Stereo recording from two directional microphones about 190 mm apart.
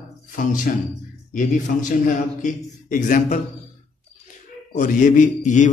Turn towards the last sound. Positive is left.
turn(degrees=40)  # may be behind; listen again after turning